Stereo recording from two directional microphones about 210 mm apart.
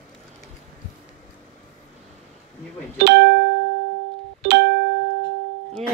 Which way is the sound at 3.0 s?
55° right (ahead or behind).